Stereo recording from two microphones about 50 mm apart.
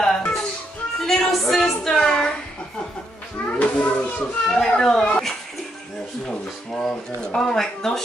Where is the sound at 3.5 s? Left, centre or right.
Left.